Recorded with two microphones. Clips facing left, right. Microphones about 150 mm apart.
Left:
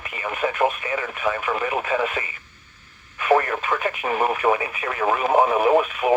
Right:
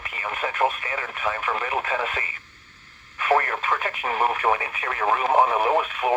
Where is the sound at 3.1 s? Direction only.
15° left (ahead or behind).